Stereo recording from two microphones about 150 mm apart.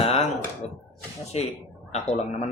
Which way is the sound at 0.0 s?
40° left (ahead or behind).